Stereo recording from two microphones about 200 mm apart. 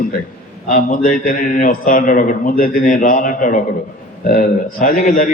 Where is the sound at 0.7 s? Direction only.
40° left (ahead or behind).